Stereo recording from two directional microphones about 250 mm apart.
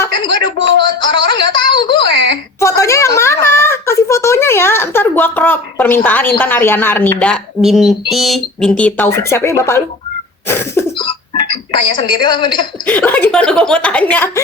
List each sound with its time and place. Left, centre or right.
0.0 s speech: centre
2.6 s a sound: centre
6.4 s a woman's voice: centre
12.8 s a woman's voice: centre